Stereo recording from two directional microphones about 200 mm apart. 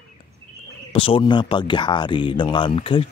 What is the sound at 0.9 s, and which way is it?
Speech, 25° left (ahead or behind).